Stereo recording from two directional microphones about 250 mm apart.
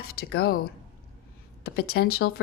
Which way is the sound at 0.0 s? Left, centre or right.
Left.